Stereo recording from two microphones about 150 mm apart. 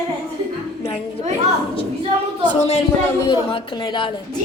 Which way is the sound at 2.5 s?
45° left (ahead or behind).